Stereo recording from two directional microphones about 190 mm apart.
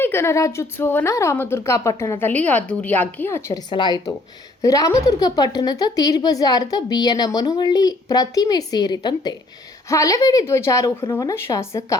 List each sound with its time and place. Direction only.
0.0 s a woman's voice: 15° left (ahead or behind)